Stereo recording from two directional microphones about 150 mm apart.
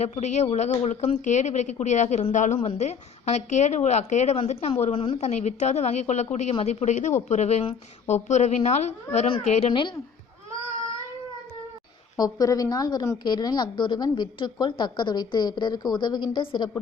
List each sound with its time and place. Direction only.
0.0 s a woman's voice: 50° left (ahead or behind)
12.1 s a woman's voice: 25° left (ahead or behind)